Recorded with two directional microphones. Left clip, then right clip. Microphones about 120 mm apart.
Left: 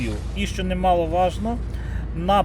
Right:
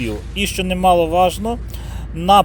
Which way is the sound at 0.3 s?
25° right (ahead or behind).